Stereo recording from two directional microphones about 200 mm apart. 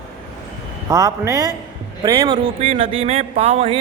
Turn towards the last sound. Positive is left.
turn(degrees=-30)  # may be behind; listen again after turning